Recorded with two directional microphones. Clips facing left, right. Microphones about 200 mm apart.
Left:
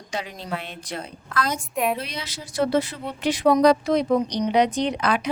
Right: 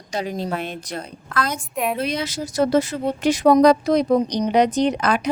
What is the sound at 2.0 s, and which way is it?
A woman's voice, 50° right (ahead or behind).